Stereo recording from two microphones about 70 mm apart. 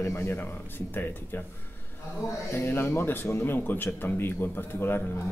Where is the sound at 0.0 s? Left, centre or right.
Left.